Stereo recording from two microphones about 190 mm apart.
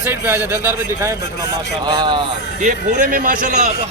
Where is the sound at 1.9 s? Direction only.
25° right (ahead or behind).